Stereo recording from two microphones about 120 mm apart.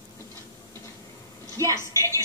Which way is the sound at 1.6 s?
25° right (ahead or behind).